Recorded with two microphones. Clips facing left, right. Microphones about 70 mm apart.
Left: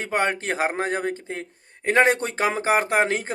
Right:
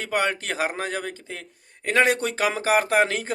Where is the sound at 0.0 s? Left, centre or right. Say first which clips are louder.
Left 1 dB; left.